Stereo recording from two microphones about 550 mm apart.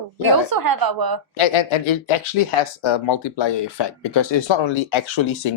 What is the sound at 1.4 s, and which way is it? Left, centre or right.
Speech, left.